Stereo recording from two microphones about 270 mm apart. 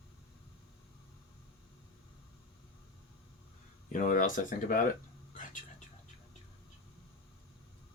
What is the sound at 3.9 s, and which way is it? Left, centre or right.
Speech, left.